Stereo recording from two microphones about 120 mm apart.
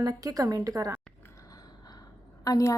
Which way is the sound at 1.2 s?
25° left (ahead or behind).